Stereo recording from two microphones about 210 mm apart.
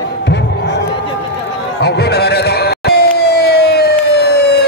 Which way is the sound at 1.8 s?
50° left (ahead or behind).